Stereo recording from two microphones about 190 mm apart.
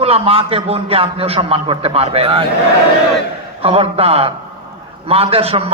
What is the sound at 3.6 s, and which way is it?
A man's voice, 30° right (ahead or behind).